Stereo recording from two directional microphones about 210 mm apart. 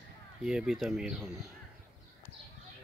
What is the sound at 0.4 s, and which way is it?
Speech, 5° right (ahead or behind).